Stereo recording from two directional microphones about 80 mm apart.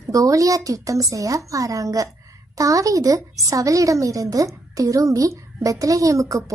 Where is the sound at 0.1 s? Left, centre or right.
Right.